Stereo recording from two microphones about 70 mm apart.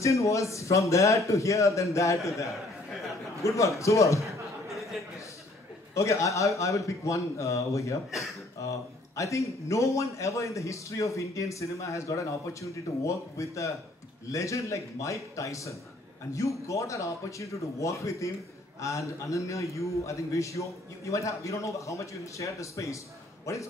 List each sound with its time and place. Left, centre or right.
0.0 s a man's voice: left
5.9 s a man's voice: left